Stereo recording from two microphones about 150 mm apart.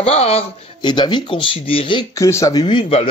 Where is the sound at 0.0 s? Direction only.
45° left (ahead or behind).